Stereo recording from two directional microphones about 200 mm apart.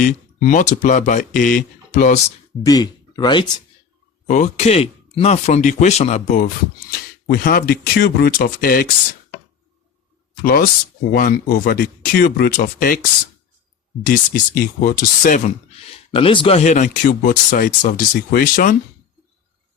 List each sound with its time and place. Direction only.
0.0 s speech: 40° left (ahead or behind)
2.6 s speech: 20° left (ahead or behind)
4.3 s speech: 35° left (ahead or behind)
7.3 s speech: 50° left (ahead or behind)
10.4 s speech: 50° left (ahead or behind)
14.1 s speech: 45° left (ahead or behind)
16.1 s speech: 25° left (ahead or behind); by 18.8 s 45° left (ahead or behind)